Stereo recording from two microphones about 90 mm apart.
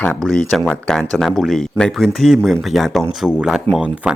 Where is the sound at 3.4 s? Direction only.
10° right (ahead or behind).